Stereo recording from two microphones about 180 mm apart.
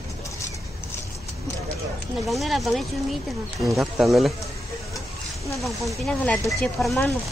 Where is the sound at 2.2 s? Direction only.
Centre (ahead or behind).